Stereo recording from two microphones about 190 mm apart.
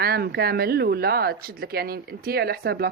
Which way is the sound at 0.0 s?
55° right (ahead or behind).